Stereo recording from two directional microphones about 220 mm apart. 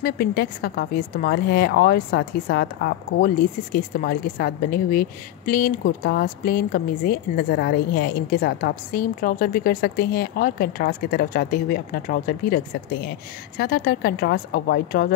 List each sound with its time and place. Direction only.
0.0 s a woman's voice: 45° left (ahead or behind)